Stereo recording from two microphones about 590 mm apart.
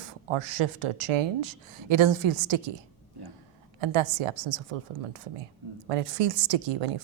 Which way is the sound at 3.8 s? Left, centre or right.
Right.